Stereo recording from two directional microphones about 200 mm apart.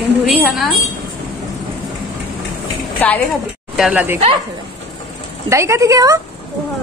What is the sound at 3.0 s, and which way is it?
Speech, 10° left (ahead or behind).